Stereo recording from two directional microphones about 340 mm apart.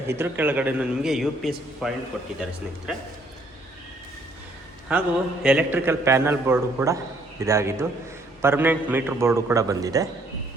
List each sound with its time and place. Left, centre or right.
0.1 s a man's voice: centre
4.9 s a man's voice: centre